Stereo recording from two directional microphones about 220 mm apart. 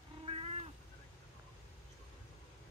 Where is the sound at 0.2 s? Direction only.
25° right (ahead or behind).